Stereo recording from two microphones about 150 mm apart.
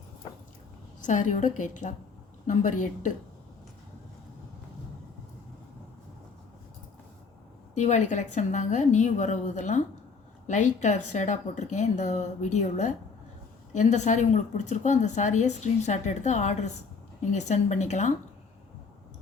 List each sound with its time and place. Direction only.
1.0 s a woman's voice: 55° left (ahead or behind)
7.8 s a woman's voice: 50° left (ahead or behind)